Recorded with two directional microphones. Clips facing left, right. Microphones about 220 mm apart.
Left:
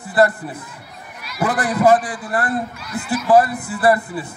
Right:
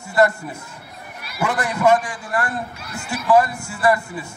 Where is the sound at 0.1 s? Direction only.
35° left (ahead or behind).